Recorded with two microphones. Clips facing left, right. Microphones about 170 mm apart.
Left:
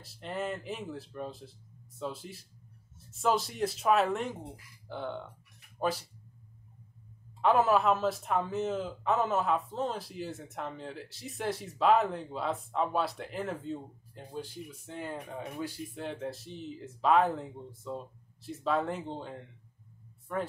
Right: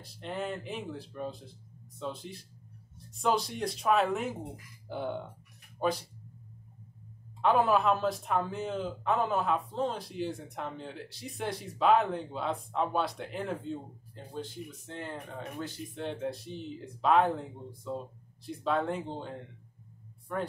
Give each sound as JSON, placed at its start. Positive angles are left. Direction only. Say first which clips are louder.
{"t": 0.0, "sound": "a man's voice", "louder": "even", "side_deg": 5}
{"t": 4.4, "sound": "speech", "louder": "right 3 dB", "side_deg": -15}
{"t": 5.8, "sound": "speech", "louder": "right 1 dB", "side_deg": 0}
{"t": 7.4, "sound": "a man's voice", "louder": "even", "side_deg": 5}